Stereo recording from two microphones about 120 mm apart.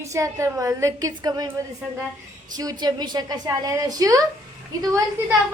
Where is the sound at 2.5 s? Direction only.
35° right (ahead or behind).